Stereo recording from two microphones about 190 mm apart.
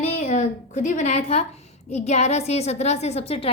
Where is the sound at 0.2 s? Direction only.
40° left (ahead or behind).